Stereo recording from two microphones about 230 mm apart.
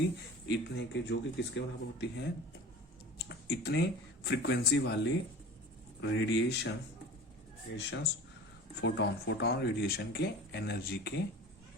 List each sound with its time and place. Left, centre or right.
0.5 s speech: left
7.8 s speech: left